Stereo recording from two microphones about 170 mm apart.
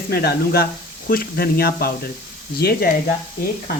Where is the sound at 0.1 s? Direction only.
70° left (ahead or behind).